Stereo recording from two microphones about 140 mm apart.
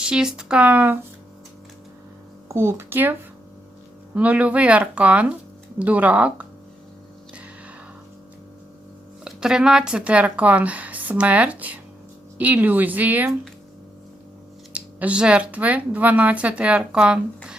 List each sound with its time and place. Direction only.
0.0 s speech: 5° right (ahead or behind)
2.5 s speech: 20° right (ahead or behind)
9.2 s speech: 5° right (ahead or behind)
14.7 s speech: 10° right (ahead or behind)